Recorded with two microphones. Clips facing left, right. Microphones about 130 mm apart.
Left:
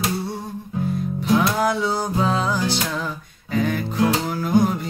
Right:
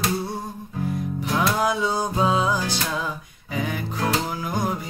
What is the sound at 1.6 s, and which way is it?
Music, 15° right (ahead or behind).